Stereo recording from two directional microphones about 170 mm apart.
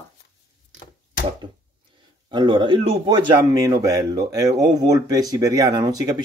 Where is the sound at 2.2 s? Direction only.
25° right (ahead or behind).